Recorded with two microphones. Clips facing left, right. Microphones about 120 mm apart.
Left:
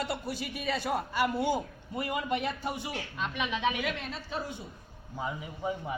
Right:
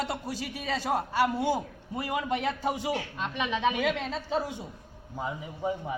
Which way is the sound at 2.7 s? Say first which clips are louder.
Right 7 dB; 90° right.